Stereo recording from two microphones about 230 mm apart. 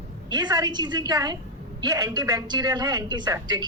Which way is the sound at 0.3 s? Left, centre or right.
Centre.